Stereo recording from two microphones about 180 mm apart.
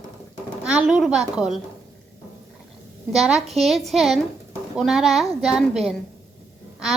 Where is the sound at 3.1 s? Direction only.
Centre (ahead or behind).